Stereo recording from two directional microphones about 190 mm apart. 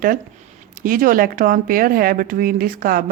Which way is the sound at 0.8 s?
45° right (ahead or behind).